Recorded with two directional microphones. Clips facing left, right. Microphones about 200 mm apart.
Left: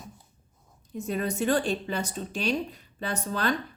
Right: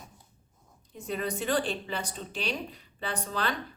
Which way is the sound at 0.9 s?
45° left (ahead or behind).